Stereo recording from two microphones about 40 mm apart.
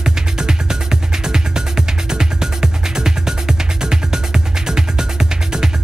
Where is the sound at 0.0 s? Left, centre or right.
Centre.